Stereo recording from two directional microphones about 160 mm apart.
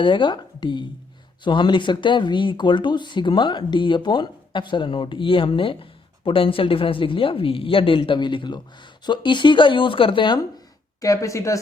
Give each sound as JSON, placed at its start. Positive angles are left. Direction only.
{"t": 0.0, "sound": "speech", "side_deg": 30}
{"t": 11.0, "sound": "speech", "side_deg": 20}